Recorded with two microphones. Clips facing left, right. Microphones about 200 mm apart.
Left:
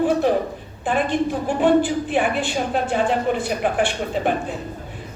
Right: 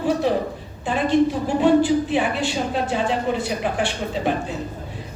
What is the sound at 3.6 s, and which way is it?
Speech, 55° left (ahead or behind).